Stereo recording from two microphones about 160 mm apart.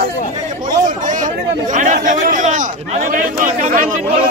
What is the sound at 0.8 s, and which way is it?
Chatter, 55° right (ahead or behind).